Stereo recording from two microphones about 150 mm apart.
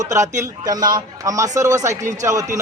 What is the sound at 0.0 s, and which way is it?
A man's voice, 20° right (ahead or behind).